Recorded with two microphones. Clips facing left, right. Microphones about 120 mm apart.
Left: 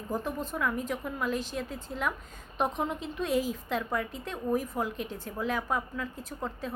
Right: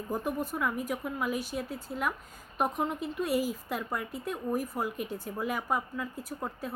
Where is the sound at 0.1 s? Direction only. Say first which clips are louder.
Even; 15° right (ahead or behind).